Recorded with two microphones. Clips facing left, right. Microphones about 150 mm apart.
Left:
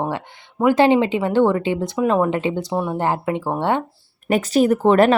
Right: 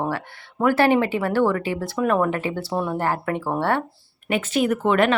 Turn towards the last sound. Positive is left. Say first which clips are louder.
# left 5 dB
turn(degrees=35)  # may be behind; listen again after turning